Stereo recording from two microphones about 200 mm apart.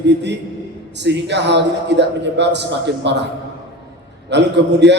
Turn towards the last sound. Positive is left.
turn(degrees=-60)  # may be behind; listen again after turning